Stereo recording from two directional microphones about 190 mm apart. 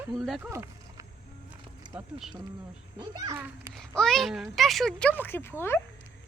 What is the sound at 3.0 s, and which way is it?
Speech, 20° right (ahead or behind).